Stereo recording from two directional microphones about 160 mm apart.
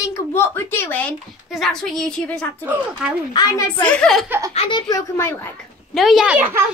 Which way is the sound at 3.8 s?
5° left (ahead or behind).